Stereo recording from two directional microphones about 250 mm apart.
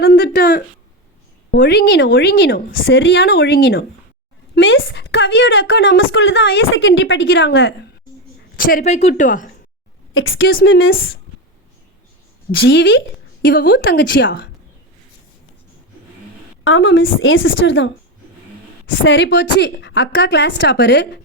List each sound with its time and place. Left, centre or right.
0.0 s a sound: left
1.5 s a woman's voice: left
8.5 s a woman's voice: left
10.2 s a woman's voice: left
12.5 s a woman's voice: left
16.6 s a woman's voice: left